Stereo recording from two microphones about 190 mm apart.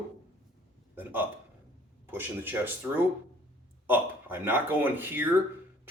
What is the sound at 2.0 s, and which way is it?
Speech, 10° right (ahead or behind).